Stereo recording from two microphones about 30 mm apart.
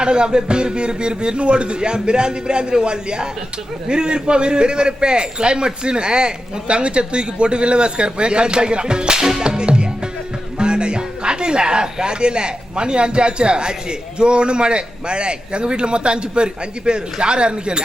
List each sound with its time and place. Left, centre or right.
0.0 s a man's voice: right
9.4 s music: right
10.6 s a man's voice: right